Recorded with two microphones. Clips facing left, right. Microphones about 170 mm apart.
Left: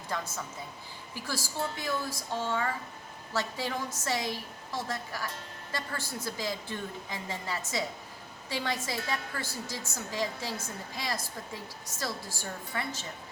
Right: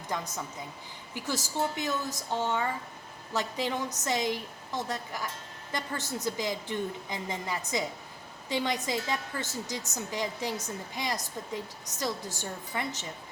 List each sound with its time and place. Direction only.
0.1 s a woman's voice: 15° right (ahead or behind)
4.0 s a woman's voice: 20° right (ahead or behind)